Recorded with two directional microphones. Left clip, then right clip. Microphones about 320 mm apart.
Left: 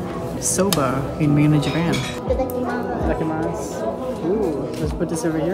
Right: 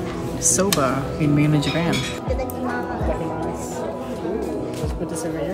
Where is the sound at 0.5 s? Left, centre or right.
Centre.